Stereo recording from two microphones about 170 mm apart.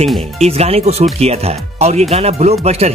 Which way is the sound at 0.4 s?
40° right (ahead or behind).